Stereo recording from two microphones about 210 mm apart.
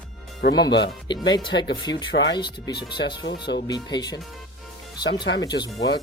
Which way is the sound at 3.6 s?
20° left (ahead or behind).